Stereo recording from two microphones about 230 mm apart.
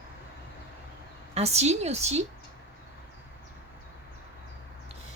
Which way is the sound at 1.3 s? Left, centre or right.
Right.